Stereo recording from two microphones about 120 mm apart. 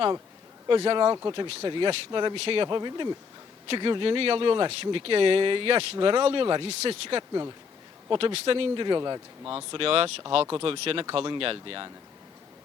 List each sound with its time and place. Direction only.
0.7 s a man's voice: 45° right (ahead or behind)
9.4 s speech: 10° right (ahead or behind)
9.7 s speech: 50° right (ahead or behind)